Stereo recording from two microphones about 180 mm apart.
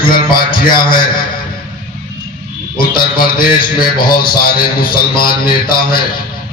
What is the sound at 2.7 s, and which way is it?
A man's voice, 55° left (ahead or behind).